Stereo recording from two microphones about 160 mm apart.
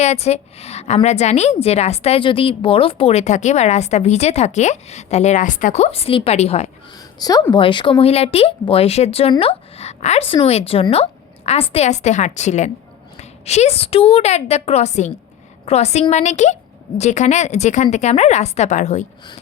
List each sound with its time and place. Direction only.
0.0 s a woman's voice: 45° left (ahead or behind)
7.2 s a woman's voice: 25° left (ahead or behind); by 19.0 s 45° left (ahead or behind)